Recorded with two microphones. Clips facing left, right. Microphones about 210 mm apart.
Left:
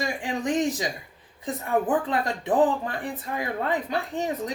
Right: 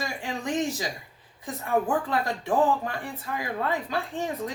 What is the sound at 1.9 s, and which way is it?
Speech, 20° left (ahead or behind).